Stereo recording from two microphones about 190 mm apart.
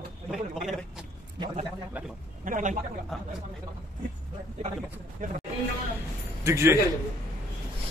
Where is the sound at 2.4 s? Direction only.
40° right (ahead or behind).